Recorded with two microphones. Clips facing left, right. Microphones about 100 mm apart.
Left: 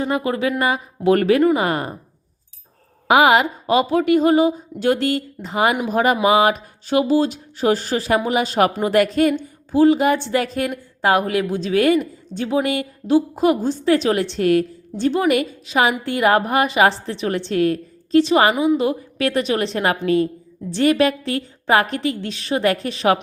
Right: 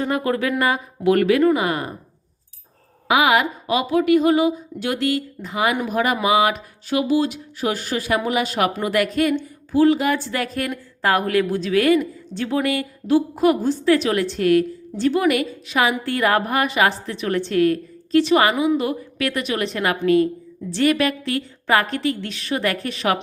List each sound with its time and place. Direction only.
0.0 s a woman's voice: 20° left (ahead or behind)
1.1 s speech: 35° left (ahead or behind)
3.1 s a woman's voice: 35° left (ahead or behind)